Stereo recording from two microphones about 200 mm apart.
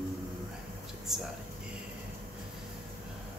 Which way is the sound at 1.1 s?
Centre (ahead or behind).